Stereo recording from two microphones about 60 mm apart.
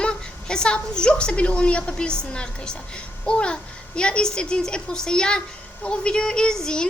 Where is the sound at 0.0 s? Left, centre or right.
Centre.